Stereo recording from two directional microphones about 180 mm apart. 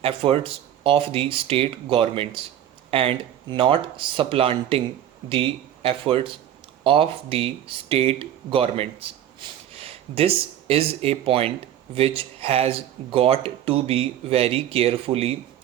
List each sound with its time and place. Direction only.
0.0 s speech: 30° right (ahead or behind)